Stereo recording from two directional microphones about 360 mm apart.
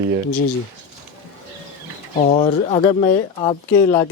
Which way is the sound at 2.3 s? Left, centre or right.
Centre.